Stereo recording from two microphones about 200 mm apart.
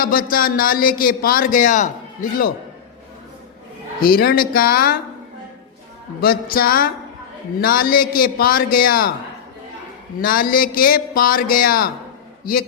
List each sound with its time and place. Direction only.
0.0 s a man's voice: 45° left (ahead or behind)
4.0 s a man's voice: 45° left (ahead or behind)
6.1 s a man's voice: 45° left (ahead or behind)
10.2 s a man's voice: 45° left (ahead or behind)